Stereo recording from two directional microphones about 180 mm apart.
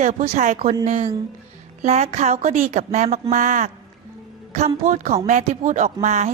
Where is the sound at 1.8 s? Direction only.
40° right (ahead or behind).